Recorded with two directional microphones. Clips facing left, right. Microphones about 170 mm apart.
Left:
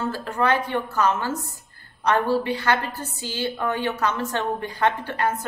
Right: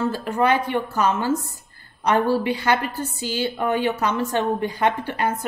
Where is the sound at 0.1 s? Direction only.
15° right (ahead or behind).